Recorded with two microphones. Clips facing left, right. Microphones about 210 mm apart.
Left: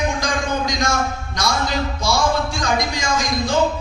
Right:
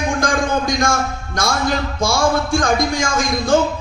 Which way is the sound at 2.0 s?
50° right (ahead or behind).